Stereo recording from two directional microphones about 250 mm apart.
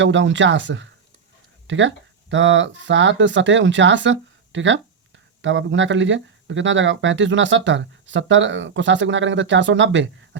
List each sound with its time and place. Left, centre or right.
0.0 s speech: right